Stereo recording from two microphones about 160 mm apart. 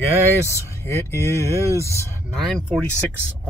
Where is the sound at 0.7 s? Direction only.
15° left (ahead or behind).